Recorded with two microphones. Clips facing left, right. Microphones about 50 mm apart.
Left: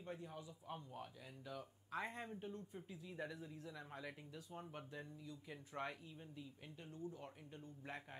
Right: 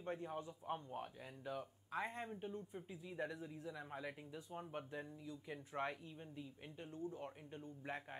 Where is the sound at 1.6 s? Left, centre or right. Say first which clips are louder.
Left 1 dB; centre.